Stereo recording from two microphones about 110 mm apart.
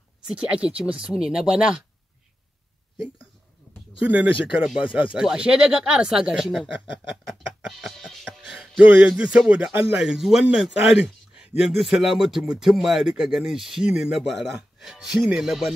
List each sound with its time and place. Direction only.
0.3 s speech: 10° right (ahead or behind)
4.0 s speech: 10° right (ahead or behind)
4.8 s speech: 50° left (ahead or behind)
5.1 s speech: 10° right (ahead or behind)
7.2 s music: centre (ahead or behind)
8.5 s a man's voice: 10° right (ahead or behind)